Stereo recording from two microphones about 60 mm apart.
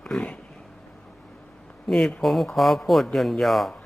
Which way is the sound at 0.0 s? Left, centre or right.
Centre.